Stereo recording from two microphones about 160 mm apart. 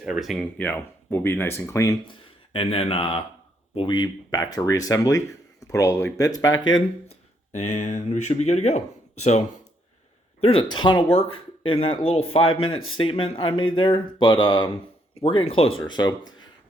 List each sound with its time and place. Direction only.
0.0 s speech: 5° right (ahead or behind)
0.5 s speech: 10° left (ahead or behind)
2.2 s speech: 35° left (ahead or behind)
7.5 s speech: 45° left (ahead or behind)
10.4 s speech: 35° left (ahead or behind)